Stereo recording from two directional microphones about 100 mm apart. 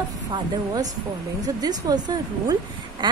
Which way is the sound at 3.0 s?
50° right (ahead or behind).